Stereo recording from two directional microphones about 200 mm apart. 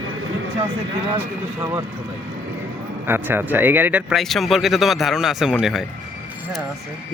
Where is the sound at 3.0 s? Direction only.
10° right (ahead or behind).